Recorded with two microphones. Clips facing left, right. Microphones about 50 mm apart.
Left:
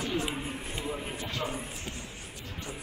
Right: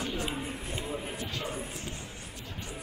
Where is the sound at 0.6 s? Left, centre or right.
Left.